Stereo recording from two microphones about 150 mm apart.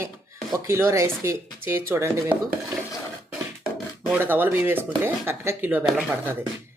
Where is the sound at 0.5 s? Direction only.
20° right (ahead or behind).